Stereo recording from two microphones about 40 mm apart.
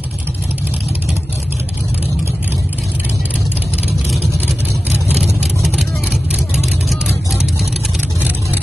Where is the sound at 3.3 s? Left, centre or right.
Right.